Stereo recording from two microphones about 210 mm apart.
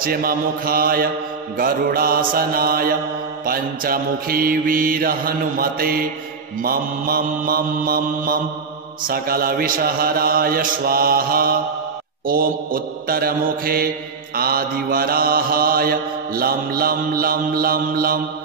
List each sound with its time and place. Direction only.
0.0 s mantra: 45° right (ahead or behind)